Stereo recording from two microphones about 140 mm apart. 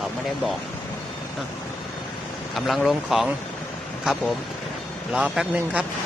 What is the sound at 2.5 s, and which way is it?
Speech, centre (ahead or behind).